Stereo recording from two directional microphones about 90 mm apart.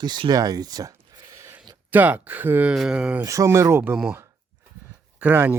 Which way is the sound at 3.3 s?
35° right (ahead or behind).